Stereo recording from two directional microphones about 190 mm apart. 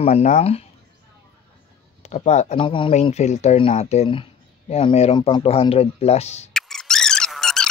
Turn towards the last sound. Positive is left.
turn(degrees=5)  # may be behind; listen again after turning